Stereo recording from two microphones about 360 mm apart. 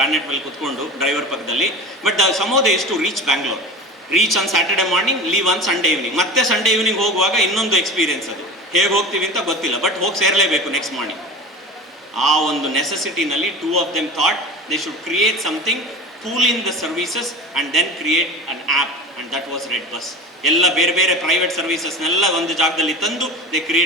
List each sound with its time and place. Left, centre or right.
0.0 s a man's voice: centre
12.1 s a man's voice: centre
14.7 s a man's voice: centre
19.3 s a man's voice: centre